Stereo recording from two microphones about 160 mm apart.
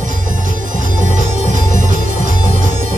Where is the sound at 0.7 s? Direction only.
55° right (ahead or behind).